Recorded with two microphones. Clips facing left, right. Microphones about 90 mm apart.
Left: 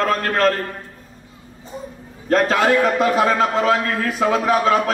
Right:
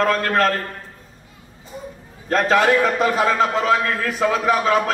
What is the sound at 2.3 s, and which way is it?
A man's voice, 35° left (ahead or behind).